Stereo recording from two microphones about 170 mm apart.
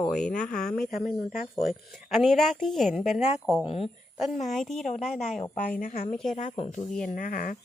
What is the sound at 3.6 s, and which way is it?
Speech, 35° left (ahead or behind).